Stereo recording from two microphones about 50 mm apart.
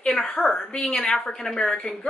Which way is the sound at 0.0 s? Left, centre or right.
Centre.